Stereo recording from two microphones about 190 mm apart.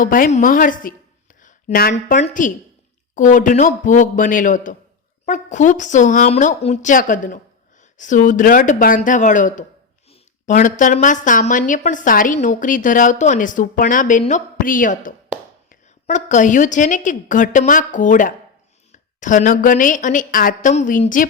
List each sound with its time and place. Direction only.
0.0 s a woman's voice: 45° left (ahead or behind)